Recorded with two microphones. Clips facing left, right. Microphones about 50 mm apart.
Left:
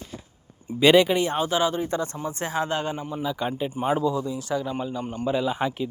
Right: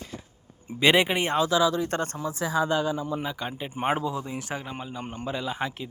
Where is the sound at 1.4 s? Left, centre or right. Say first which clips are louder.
Right 1 dB; right.